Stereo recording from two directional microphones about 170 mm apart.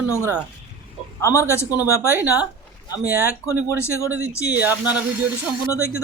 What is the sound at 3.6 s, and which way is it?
Speech, 15° left (ahead or behind).